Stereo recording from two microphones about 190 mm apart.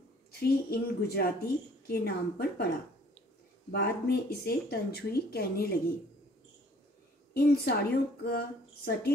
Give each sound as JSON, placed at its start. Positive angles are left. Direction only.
{"t": 0.4, "sound": "a woman's voice", "side_deg": 55}
{"t": 3.7, "sound": "a woman's voice", "side_deg": 55}
{"t": 7.3, "sound": "a woman's voice", "side_deg": 55}